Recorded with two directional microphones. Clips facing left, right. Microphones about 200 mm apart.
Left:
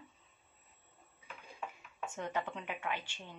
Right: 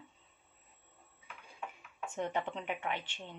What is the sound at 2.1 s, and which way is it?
Speech, 25° right (ahead or behind).